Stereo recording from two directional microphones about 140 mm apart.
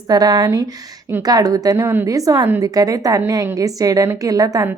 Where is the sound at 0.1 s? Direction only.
30° right (ahead or behind).